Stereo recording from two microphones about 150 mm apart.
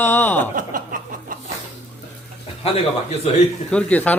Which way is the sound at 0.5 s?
65° right (ahead or behind).